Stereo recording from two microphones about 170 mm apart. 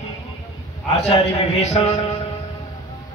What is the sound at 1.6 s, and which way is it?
Speech, 40° left (ahead or behind).